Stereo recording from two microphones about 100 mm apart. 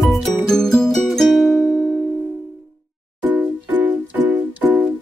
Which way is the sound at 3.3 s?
20° right (ahead or behind).